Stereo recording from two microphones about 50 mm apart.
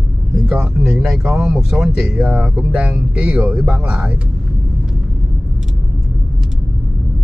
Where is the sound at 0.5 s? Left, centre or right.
Right.